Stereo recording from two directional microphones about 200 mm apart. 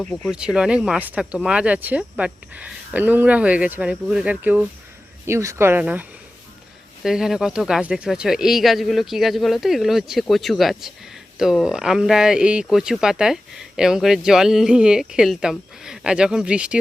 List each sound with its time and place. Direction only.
0.0 s speech: 5° left (ahead or behind)
0.3 s speech: 5° right (ahead or behind)